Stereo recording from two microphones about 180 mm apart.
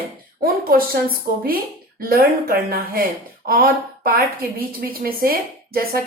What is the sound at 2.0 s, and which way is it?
A woman's voice, 55° right (ahead or behind).